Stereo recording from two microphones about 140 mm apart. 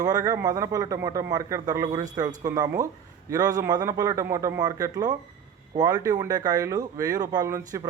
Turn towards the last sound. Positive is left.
turn(degrees=-25)  # may be behind; listen again after turning